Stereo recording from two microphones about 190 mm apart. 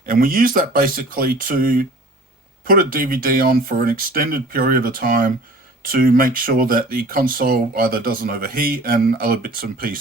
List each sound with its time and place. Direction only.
0.0 s speech: 50° right (ahead or behind)